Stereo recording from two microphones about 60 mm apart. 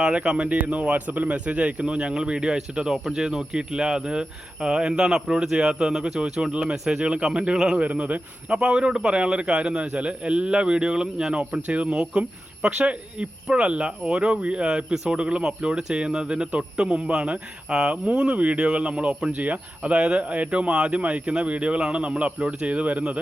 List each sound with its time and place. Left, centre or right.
0.0 s speech: centre